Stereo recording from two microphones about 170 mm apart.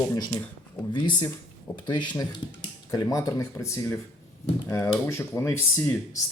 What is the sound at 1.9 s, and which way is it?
Speech, 25° left (ahead or behind).